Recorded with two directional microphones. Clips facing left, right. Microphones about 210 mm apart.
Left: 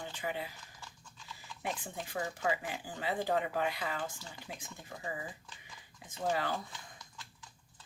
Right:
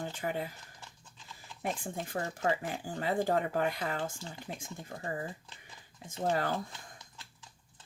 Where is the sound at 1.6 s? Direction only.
50° right (ahead or behind).